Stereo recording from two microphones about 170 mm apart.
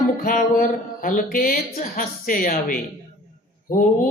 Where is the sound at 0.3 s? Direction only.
50° left (ahead or behind).